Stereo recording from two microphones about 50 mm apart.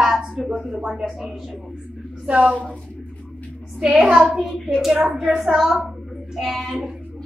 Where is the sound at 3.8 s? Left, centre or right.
Centre.